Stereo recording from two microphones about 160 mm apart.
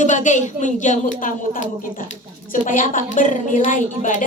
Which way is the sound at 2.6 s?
55° left (ahead or behind).